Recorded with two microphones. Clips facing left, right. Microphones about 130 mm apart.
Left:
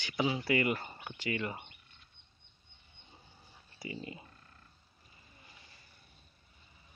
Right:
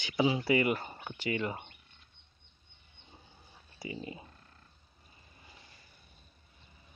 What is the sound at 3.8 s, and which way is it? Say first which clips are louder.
Speech: right 2 dB; 20° right (ahead or behind).